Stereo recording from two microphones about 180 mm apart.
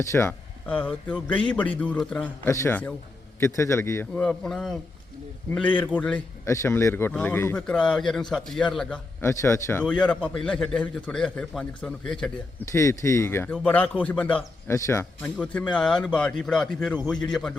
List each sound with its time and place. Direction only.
0.0 s a man's voice: 15° left (ahead or behind)
9.2 s a man's voice: 15° left (ahead or behind)
12.7 s a man's voice: 15° left (ahead or behind)